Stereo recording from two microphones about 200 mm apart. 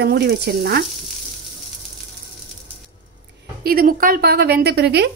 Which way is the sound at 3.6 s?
45° right (ahead or behind).